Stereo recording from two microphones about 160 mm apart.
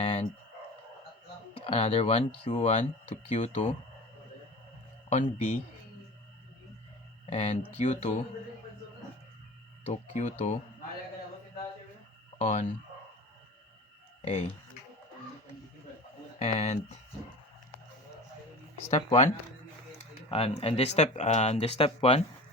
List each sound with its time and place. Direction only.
0.0 s chicken: 45° left (ahead or behind)
1.6 s speech: 40° left (ahead or behind)
5.0 s speech: 50° left (ahead or behind)
7.3 s speech: 45° left (ahead or behind)
9.8 s speech: 45° left (ahead or behind)
12.4 s speech: 50° left (ahead or behind)
16.4 s speech: 40° left (ahead or behind)
18.9 s speech: 45° left (ahead or behind)
20.3 s speech: 40° left (ahead or behind)